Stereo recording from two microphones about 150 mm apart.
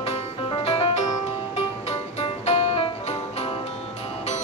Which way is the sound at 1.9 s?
45° left (ahead or behind).